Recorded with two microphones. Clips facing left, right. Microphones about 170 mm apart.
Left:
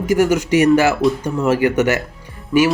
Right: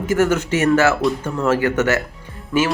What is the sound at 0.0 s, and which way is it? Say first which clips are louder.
Speech: left 2 dB; 15° left (ahead or behind).